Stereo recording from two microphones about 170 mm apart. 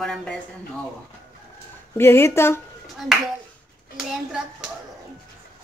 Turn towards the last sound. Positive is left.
turn(degrees=-5)  # may be behind; listen again after turning